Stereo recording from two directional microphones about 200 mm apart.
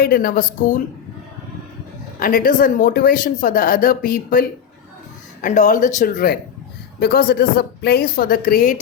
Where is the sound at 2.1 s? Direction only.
45° left (ahead or behind).